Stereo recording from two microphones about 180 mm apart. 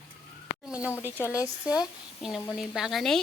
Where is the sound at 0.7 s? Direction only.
5° right (ahead or behind).